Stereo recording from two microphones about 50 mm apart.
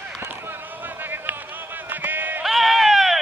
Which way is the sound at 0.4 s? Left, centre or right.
Right.